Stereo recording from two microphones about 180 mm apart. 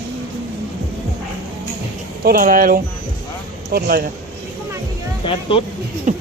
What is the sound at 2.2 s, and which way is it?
A man's voice, 55° right (ahead or behind).